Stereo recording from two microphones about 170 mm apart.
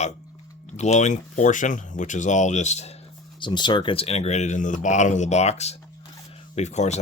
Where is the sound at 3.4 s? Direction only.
25° left (ahead or behind).